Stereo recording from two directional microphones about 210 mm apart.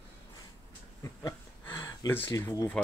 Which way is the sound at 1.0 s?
15° left (ahead or behind).